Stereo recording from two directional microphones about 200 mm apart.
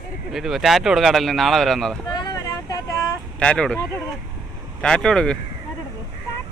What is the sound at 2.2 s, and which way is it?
Vehicle, 20° left (ahead or behind).